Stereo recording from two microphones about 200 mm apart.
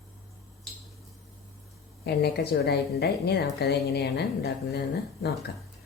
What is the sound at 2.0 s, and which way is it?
A woman's voice, 55° left (ahead or behind).